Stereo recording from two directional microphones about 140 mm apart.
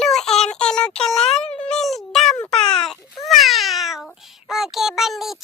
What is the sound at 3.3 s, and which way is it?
Meow, centre (ahead or behind).